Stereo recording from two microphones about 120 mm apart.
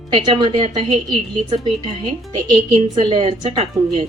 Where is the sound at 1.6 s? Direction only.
40° right (ahead or behind).